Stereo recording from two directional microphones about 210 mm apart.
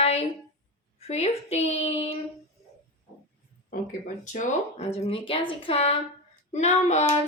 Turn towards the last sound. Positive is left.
turn(degrees=35)  # may be behind; listen again after turning